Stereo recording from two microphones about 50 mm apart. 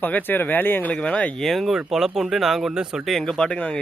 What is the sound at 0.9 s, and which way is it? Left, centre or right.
Speech, left.